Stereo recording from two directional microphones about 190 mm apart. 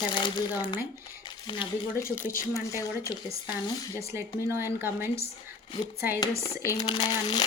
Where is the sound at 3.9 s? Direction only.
15° right (ahead or behind).